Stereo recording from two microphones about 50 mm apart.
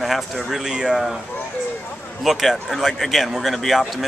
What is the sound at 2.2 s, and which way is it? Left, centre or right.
Speech, centre.